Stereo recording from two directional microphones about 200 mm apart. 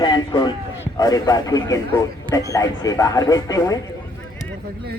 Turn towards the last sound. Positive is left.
turn(degrees=20)  # may be behind; listen again after turning